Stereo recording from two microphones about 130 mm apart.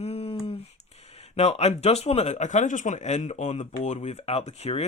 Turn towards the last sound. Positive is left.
turn(degrees=50)  # may be behind; listen again after turning